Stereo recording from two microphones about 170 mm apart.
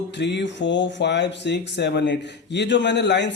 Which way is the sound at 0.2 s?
90° left.